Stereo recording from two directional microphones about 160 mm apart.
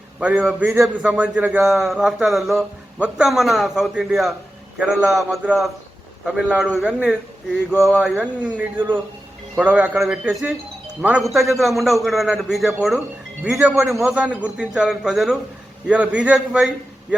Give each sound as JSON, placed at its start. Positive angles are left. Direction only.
{"t": 0.2, "sound": "a man's voice", "side_deg": -10}